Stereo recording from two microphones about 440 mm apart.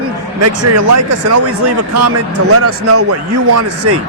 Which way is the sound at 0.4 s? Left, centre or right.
Right.